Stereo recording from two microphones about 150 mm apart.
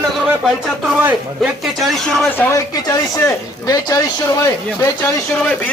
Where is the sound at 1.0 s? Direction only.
10° right (ahead or behind).